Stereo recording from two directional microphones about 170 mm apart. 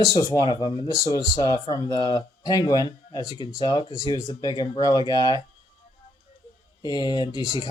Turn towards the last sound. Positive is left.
turn(degrees=25)  # may be behind; listen again after turning